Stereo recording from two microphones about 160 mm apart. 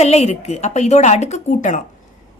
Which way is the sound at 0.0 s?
40° left (ahead or behind).